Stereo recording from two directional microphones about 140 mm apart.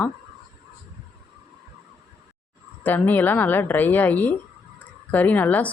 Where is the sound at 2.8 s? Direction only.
15° left (ahead or behind).